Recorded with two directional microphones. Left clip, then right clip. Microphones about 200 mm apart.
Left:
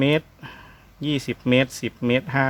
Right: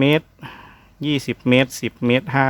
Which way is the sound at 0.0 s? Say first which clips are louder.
Right 3 dB; 20° right (ahead or behind).